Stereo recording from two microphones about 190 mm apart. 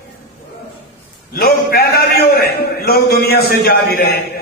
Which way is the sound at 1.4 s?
55° left (ahead or behind).